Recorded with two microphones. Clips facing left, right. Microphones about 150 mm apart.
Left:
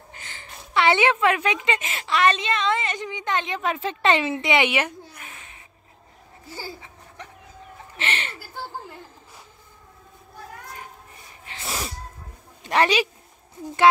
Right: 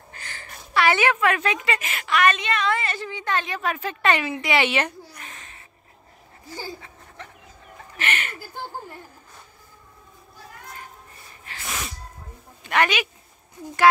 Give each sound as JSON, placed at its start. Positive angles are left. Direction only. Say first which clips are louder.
{"t": 0.1, "sound": "a woman's voice", "louder": "right 2 dB", "side_deg": 20}
{"t": 6.4, "sound": "speech", "louder": "right 1 dB", "side_deg": -15}
{"t": 7.2, "sound": "a sound", "louder": "even", "side_deg": 15}
{"t": 8.0, "sound": "chuckle", "louder": "right 1 dB", "side_deg": 30}
{"t": 11.4, "sound": "sneeze", "louder": "left 2 dB", "side_deg": 25}
{"t": 12.6, "sound": "a woman's voice", "louder": "left 2 dB", "side_deg": 30}